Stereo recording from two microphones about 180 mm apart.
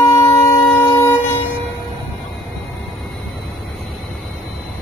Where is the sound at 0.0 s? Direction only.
15° left (ahead or behind).